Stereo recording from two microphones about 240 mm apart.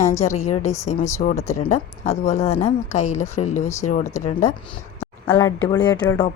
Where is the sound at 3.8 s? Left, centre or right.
Left.